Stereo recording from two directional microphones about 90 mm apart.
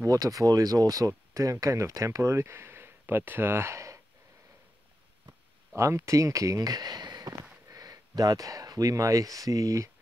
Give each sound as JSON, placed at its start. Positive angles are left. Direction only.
{"t": 0.0, "sound": "speech", "side_deg": -40}
{"t": 5.8, "sound": "speech", "side_deg": -35}